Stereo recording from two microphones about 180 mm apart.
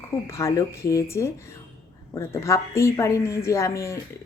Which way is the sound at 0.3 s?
15° left (ahead or behind).